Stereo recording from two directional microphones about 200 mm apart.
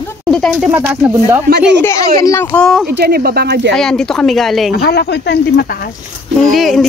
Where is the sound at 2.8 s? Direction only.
50° right (ahead or behind).